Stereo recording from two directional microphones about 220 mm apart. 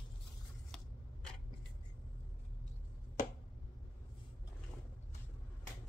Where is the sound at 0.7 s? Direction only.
Centre (ahead or behind).